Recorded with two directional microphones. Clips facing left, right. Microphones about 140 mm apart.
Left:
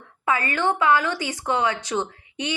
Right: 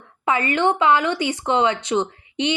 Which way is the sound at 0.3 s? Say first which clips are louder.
Right 3 dB; 25° right (ahead or behind).